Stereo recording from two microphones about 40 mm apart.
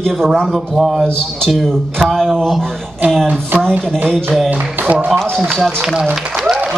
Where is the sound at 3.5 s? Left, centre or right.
Right.